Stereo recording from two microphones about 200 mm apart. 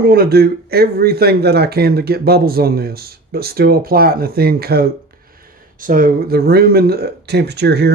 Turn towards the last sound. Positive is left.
turn(degrees=-55)  # may be behind; listen again after turning